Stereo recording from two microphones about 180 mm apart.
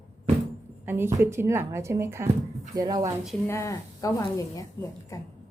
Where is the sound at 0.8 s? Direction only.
15° right (ahead or behind).